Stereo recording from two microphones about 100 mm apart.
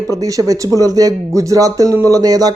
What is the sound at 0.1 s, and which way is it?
Speech, 35° right (ahead or behind).